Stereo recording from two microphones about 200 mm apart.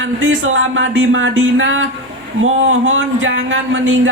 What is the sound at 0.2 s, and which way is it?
Speech, 75° right (ahead or behind).